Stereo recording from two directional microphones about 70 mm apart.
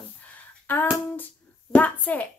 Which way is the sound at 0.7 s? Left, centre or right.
Left.